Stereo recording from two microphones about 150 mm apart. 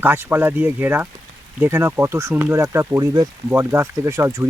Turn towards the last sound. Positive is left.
turn(degrees=-20)  # may be behind; listen again after turning